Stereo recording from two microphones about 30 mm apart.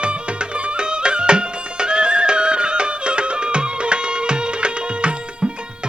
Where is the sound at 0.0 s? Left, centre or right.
Right.